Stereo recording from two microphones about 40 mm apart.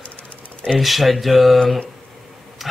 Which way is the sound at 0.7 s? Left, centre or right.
Centre.